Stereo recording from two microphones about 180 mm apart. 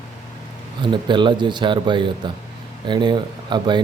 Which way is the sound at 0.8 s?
25° right (ahead or behind).